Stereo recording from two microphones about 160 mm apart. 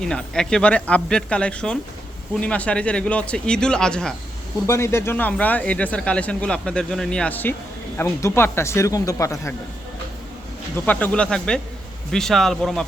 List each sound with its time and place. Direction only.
0.0 s a man's voice: 5° left (ahead or behind)
4.6 s speech: 15° left (ahead or behind)
10.8 s a man's voice: 10° left (ahead or behind)